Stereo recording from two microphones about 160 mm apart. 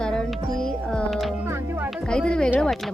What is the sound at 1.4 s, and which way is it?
Speech, 15° right (ahead or behind).